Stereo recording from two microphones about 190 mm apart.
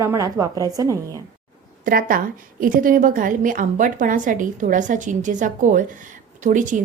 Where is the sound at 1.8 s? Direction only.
50° right (ahead or behind).